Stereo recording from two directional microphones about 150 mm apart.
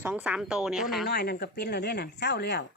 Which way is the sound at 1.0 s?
90° left.